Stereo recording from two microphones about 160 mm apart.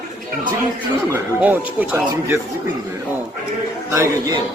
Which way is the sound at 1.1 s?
10° right (ahead or behind).